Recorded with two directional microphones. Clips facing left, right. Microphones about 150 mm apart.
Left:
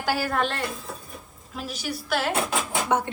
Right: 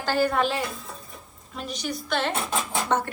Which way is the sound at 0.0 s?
5° left (ahead or behind).